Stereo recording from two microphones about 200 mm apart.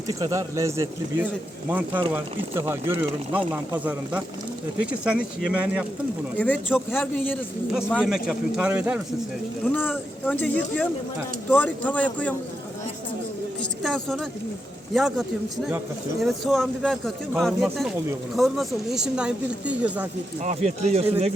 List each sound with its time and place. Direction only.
0.2 s speech: 15° right (ahead or behind)
6.3 s speech: 10° left (ahead or behind)
7.7 s speech: 5° right (ahead or behind)
9.7 s speech: 10° left (ahead or behind)
13.6 s a woman's voice: centre (ahead or behind)
20.4 s speech: 35° right (ahead or behind)